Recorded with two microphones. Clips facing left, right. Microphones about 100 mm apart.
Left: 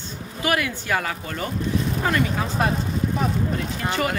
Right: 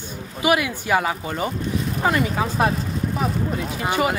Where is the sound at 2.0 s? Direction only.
5° right (ahead or behind).